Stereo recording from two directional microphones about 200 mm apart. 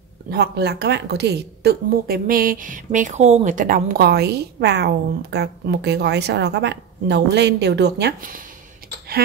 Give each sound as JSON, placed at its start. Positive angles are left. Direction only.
{"t": 0.3, "sound": "a woman's voice", "side_deg": -55}